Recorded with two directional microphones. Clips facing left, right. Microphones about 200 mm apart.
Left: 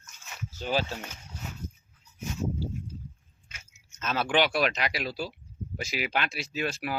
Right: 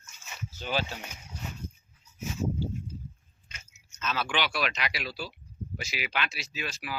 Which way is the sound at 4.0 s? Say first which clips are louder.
Left 5 dB; 50° left (ahead or behind).